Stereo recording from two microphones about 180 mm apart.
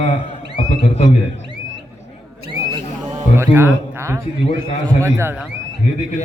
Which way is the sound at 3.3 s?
15° right (ahead or behind).